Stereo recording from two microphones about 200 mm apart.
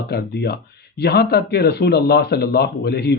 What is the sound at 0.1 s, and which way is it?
Speech, 55° left (ahead or behind).